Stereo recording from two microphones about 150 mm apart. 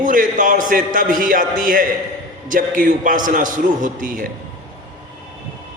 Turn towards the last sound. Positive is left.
turn(degrees=-65)  # may be behind; listen again after turning